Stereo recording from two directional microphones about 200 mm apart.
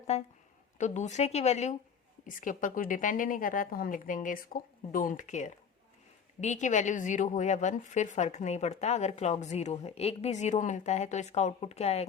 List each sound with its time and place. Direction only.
0.1 s a woman's voice: 30° left (ahead or behind)